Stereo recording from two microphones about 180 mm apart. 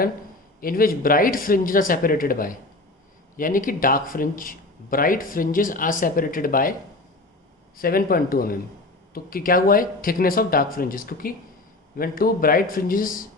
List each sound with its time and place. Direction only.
0.6 s speech: 55° left (ahead or behind)
7.8 s speech: 55° left (ahead or behind)